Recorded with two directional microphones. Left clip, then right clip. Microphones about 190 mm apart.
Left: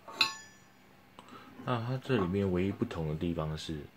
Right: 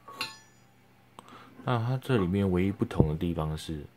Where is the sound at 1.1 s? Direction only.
35° right (ahead or behind).